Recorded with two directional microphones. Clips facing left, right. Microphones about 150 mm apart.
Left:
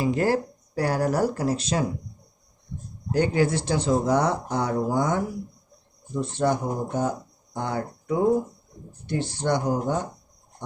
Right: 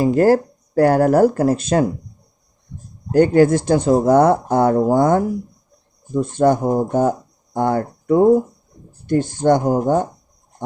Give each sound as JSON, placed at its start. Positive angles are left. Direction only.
{"t": 0.0, "sound": "speech", "side_deg": -45}
{"t": 3.1, "sound": "speech", "side_deg": -50}